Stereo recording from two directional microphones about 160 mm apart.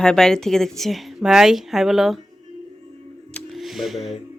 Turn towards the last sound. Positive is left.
turn(degrees=0)  # may be behind; listen again after turning